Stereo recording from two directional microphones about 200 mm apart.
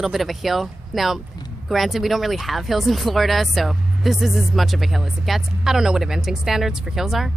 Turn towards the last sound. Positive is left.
turn(degrees=0)  # may be behind; listen again after turning